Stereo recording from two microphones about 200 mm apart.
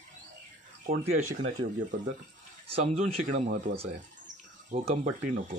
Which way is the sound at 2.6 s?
30° right (ahead or behind).